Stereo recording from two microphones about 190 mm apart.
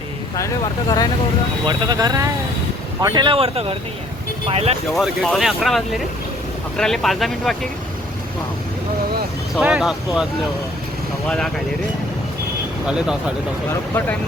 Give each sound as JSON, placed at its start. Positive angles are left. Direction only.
{"t": 0.3, "sound": "speech", "side_deg": 20}
{"t": 1.6, "sound": "speech", "side_deg": -20}
{"t": 4.9, "sound": "speech", "side_deg": 0}
{"t": 9.6, "sound": "speech", "side_deg": -5}
{"t": 11.3, "sound": "speech", "side_deg": 5}